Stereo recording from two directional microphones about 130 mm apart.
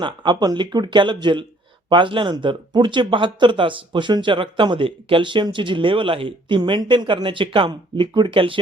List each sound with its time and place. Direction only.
0.0 s speech: 35° right (ahead or behind)